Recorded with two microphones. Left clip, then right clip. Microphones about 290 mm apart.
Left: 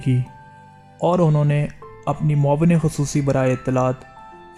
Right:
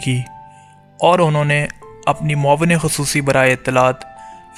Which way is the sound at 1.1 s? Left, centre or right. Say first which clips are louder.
Right 6 dB; right.